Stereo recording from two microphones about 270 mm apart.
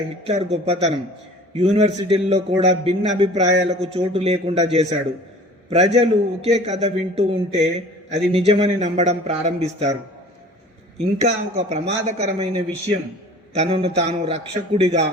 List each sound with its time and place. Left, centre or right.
0.3 s a man's voice: right
11.2 s a man's voice: right
13.6 s a man's voice: right